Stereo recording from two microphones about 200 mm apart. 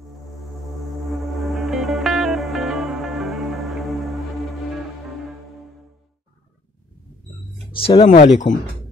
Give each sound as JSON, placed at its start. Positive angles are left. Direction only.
{"t": 0.5, "sound": "music", "side_deg": 0}
{"t": 7.7, "sound": "speech", "side_deg": 25}
{"t": 8.1, "sound": "speech", "side_deg": 40}